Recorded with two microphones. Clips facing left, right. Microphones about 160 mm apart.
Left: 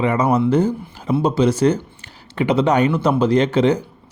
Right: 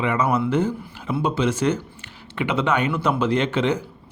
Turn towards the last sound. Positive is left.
turn(degrees=40)  # may be behind; listen again after turning